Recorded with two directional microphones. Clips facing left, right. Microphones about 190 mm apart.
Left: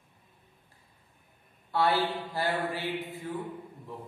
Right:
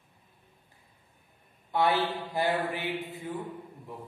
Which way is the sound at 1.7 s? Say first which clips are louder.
Even; 15° right (ahead or behind).